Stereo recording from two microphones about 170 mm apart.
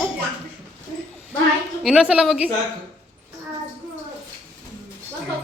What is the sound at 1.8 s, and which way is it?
Speech, 5° right (ahead or behind).